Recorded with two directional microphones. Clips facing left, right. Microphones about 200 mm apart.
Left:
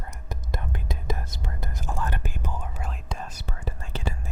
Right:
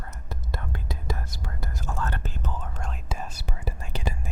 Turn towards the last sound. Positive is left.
turn(degrees=-15)  # may be behind; listen again after turning